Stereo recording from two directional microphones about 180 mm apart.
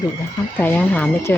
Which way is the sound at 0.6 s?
10° left (ahead or behind).